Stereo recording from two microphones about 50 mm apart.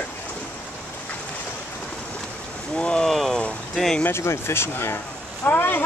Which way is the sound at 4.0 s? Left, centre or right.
Left.